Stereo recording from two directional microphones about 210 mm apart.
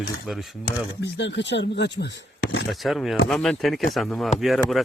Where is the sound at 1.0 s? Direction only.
55° left (ahead or behind).